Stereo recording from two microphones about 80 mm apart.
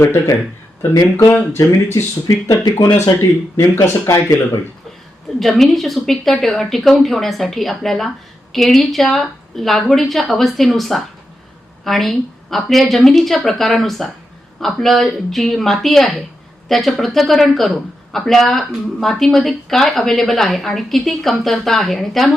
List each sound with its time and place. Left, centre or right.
0.0 s speech: left
1.5 s speech: left
2.2 s speech: left
3.2 s speech: left
5.4 s a man's voice: centre